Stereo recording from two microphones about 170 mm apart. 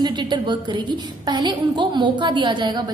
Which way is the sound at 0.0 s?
25° right (ahead or behind).